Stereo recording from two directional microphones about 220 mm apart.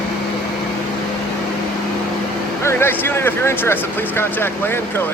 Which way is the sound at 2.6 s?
10° left (ahead or behind).